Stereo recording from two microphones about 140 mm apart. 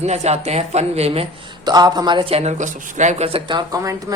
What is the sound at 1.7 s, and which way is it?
A man's voice, 30° right (ahead or behind).